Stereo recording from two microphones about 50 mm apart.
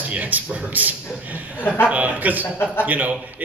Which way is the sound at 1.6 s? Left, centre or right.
Left.